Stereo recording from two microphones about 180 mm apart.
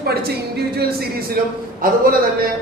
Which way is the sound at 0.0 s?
60° right (ahead or behind).